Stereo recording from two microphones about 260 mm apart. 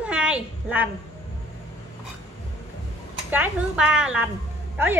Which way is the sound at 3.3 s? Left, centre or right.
Centre.